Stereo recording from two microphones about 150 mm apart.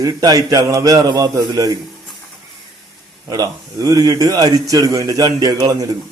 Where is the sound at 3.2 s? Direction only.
20° right (ahead or behind).